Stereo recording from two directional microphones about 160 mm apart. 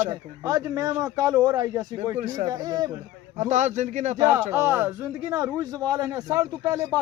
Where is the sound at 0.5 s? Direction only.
20° right (ahead or behind).